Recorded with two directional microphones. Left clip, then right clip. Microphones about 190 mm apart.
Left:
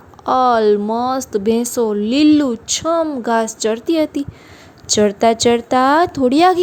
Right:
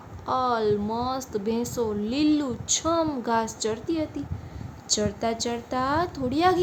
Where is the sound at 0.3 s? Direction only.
40° left (ahead or behind).